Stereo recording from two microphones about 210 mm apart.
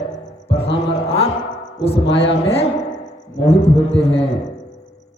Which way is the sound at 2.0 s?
60° left (ahead or behind).